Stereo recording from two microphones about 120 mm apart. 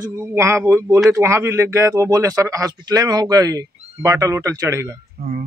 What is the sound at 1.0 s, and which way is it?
Speech, 25° right (ahead or behind).